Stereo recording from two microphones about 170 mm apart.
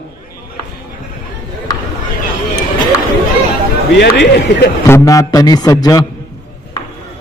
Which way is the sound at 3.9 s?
90° left.